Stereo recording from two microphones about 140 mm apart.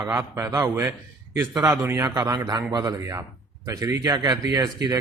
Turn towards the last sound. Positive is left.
turn(degrees=-25)  # may be behind; listen again after turning